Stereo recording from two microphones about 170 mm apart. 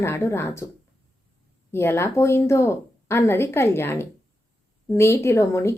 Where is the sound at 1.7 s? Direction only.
15° left (ahead or behind).